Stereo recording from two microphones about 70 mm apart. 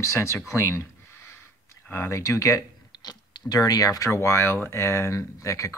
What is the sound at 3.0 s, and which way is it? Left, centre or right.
Speech, left.